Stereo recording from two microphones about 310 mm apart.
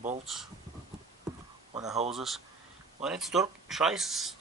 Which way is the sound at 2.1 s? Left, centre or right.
Centre.